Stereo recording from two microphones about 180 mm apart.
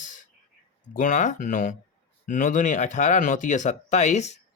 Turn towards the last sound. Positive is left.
turn(degrees=40)  # may be behind; listen again after turning